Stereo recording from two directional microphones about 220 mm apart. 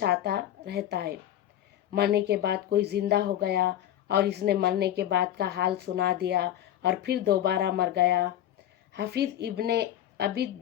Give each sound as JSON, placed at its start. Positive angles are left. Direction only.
{"t": 0.0, "sound": "speech", "side_deg": -45}